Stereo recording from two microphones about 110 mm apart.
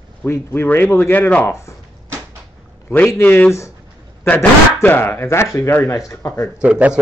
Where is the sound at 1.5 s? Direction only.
25° left (ahead or behind).